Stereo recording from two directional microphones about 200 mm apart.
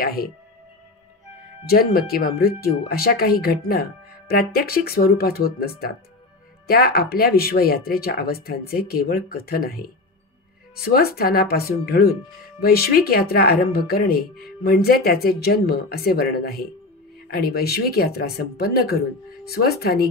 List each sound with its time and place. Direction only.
0.0 s speech: 50° left (ahead or behind)
1.7 s speech: 50° left (ahead or behind)
10.8 s speech: 50° left (ahead or behind)